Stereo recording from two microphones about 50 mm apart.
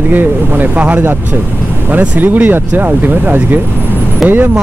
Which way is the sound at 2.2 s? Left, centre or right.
Right.